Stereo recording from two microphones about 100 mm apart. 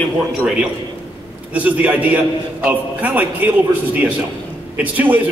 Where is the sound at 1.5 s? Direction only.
15° right (ahead or behind).